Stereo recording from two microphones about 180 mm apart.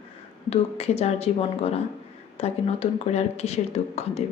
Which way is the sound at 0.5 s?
35° left (ahead or behind).